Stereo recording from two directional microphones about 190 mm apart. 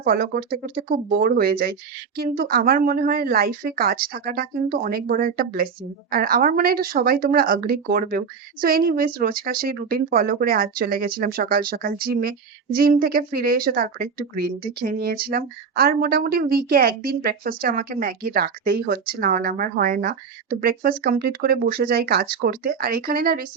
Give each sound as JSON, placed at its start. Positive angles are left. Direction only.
{"t": 0.0, "sound": "speech", "side_deg": -50}